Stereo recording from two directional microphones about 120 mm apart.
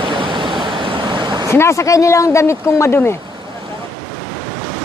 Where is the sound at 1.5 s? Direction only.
25° left (ahead or behind).